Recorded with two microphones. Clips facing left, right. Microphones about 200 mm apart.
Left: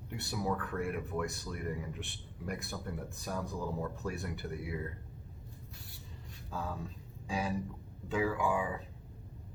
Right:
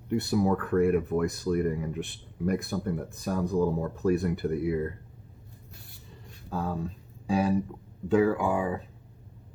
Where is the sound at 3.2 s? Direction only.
60° right (ahead or behind).